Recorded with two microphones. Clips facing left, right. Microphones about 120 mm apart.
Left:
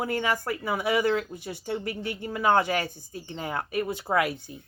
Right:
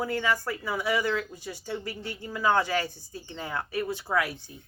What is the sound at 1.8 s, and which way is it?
Speech, 60° left (ahead or behind).